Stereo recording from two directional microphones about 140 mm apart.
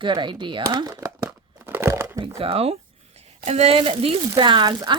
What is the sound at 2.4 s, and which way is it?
Speech, 45° right (ahead or behind).